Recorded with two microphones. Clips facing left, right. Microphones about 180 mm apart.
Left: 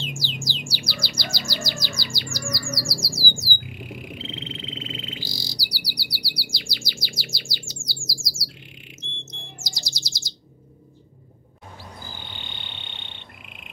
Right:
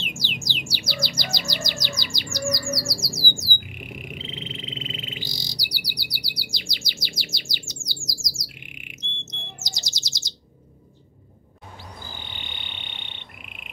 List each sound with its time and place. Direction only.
0.0 s bird: 20° right (ahead or behind)
3.3 s a sound: 20° right (ahead or behind)
12.4 s frog: 15° right (ahead or behind)